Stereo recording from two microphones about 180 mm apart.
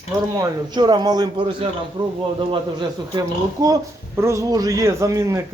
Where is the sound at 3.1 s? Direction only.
20° right (ahead or behind).